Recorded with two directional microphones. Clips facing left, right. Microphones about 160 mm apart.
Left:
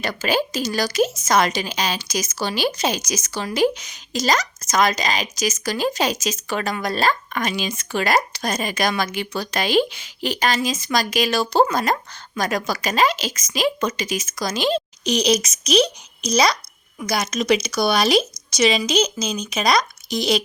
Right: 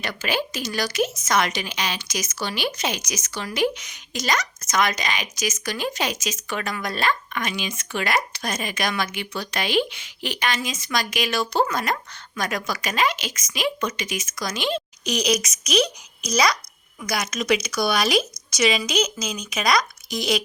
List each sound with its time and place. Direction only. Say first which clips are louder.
0.0 s a woman's voice: left 5 dB; 35° left (ahead or behind)